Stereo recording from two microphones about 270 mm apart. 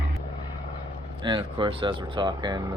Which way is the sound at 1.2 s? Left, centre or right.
Centre.